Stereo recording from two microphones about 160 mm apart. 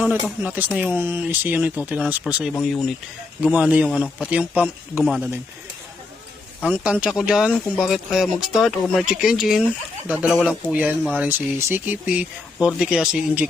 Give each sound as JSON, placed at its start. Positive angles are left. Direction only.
{"t": 0.0, "sound": "speech", "side_deg": -10}
{"t": 7.0, "sound": "speech", "side_deg": -5}